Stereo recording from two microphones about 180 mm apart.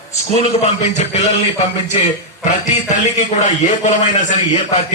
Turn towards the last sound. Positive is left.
turn(degrees=40)  # may be behind; listen again after turning